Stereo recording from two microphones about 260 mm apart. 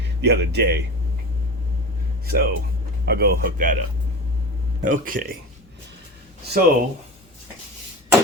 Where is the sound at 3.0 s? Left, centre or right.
Right.